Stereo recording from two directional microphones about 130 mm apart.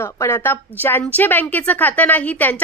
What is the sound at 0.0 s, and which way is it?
A woman's voice, 20° left (ahead or behind).